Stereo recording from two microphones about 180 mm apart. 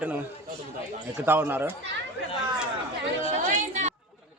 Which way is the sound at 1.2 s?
10° right (ahead or behind).